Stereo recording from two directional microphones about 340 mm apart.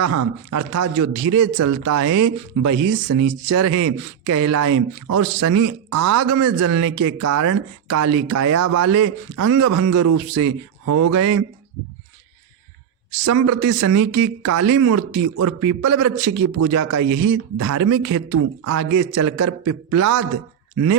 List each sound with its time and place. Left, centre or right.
0.0 s speech: right
13.2 s speech: right